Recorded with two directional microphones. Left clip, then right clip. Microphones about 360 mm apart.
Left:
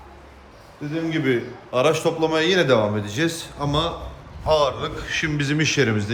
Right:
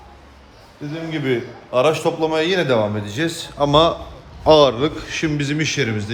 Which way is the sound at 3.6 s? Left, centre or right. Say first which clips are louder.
Right 10 dB; centre.